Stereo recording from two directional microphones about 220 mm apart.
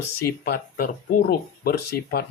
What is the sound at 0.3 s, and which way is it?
Speech, 45° left (ahead or behind).